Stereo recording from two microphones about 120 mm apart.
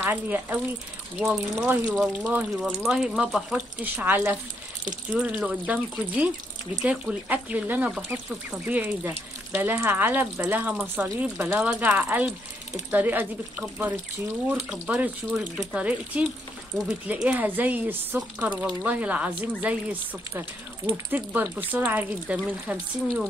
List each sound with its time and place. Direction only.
0.0 s speech: 15° right (ahead or behind)
3.8 s speech: 15° right (ahead or behind)